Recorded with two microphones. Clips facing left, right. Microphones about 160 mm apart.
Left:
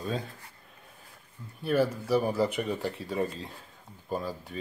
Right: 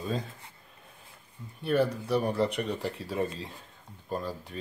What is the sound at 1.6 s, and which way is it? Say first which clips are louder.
Speech: even; centre (ahead or behind).